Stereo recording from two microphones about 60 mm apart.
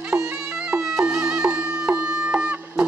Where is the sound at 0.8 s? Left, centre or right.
Centre.